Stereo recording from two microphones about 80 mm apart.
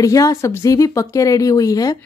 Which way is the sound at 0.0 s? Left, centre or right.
Left.